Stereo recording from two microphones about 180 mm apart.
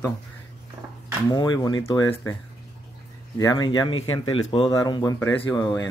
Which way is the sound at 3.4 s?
25° left (ahead or behind).